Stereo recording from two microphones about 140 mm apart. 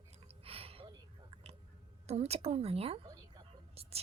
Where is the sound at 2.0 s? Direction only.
50° right (ahead or behind).